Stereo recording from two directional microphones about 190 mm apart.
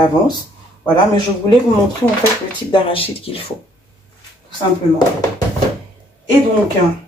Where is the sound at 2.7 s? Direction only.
30° left (ahead or behind).